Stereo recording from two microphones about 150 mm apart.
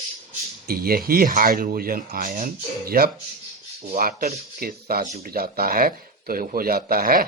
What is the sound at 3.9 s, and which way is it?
Speech, 70° right (ahead or behind).